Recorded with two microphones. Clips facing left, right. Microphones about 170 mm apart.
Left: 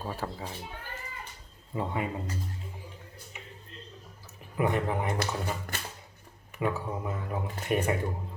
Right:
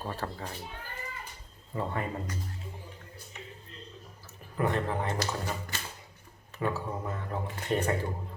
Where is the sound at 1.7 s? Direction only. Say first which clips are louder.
Left 1 dB; 10° left (ahead or behind).